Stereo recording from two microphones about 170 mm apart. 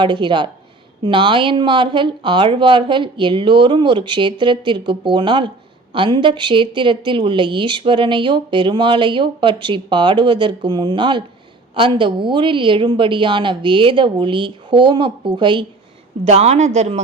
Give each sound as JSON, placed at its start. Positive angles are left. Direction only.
{"t": 0.0, "sound": "a woman's voice", "side_deg": -30}
{"t": 16.2, "sound": "a man's voice", "side_deg": -40}